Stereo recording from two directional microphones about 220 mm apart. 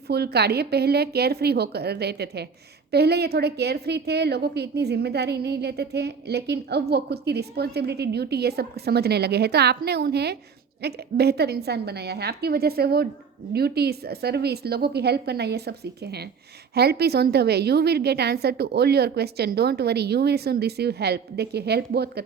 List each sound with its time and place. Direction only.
0.1 s a woman's voice: 45° right (ahead or behind)